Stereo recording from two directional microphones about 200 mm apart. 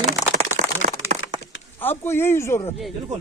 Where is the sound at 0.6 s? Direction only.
35° right (ahead or behind).